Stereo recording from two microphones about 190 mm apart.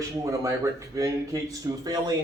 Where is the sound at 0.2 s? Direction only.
15° right (ahead or behind).